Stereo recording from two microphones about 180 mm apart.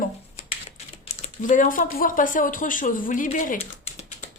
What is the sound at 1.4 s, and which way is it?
A woman's voice, 45° left (ahead or behind).